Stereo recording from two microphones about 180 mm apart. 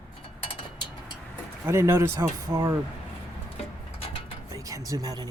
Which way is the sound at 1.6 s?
15° right (ahead or behind).